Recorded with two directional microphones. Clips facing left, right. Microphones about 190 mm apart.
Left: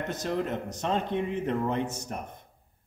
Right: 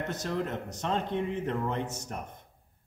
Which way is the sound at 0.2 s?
15° left (ahead or behind).